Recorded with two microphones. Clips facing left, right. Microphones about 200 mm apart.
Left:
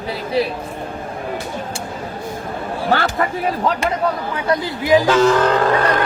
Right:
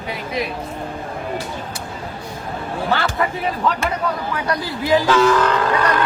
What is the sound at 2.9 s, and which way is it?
Speech, 45° left (ahead or behind).